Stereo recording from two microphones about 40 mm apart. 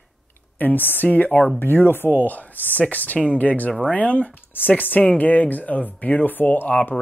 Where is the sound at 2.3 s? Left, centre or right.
Left.